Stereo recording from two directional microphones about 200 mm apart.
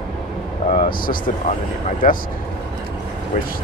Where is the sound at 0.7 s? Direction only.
45° left (ahead or behind).